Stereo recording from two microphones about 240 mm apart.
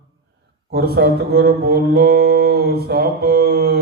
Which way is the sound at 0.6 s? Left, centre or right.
Right.